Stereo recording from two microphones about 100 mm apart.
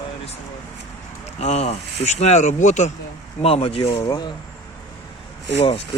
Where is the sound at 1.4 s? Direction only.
90° left.